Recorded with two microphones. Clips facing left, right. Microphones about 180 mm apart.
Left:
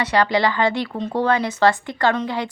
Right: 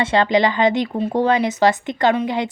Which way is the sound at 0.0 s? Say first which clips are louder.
Right 2 dB; 25° right (ahead or behind).